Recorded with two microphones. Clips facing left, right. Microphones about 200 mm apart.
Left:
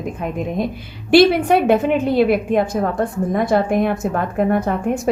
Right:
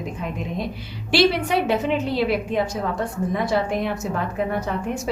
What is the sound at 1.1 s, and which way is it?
A woman's voice, 55° left (ahead or behind).